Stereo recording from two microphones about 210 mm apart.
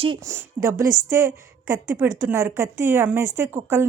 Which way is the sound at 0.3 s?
15° right (ahead or behind).